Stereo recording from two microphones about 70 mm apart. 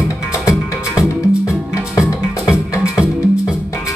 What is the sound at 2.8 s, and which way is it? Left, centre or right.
Music, centre.